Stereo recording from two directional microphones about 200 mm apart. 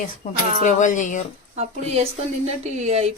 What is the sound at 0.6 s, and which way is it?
Speech, 40° left (ahead or behind).